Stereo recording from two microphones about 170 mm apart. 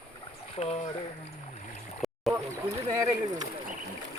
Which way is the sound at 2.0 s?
Centre (ahead or behind).